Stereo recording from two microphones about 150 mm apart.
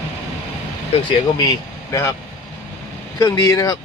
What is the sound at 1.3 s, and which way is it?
Speech, 20° left (ahead or behind).